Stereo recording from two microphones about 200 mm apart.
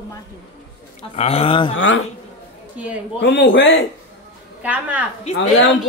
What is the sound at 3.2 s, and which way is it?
Speech, 60° left (ahead or behind).